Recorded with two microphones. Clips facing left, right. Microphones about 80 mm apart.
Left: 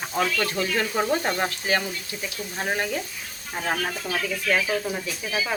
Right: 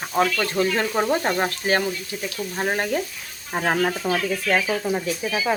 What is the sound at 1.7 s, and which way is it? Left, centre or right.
Speech, right.